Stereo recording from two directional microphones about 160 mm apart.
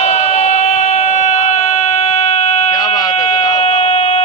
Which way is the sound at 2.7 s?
20° left (ahead or behind).